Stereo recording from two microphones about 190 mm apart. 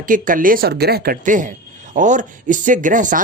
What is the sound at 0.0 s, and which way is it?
A man's voice, 45° right (ahead or behind).